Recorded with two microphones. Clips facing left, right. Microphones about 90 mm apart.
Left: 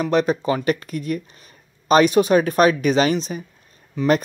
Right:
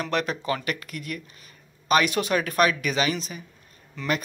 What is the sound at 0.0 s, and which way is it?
Speech, 20° left (ahead or behind).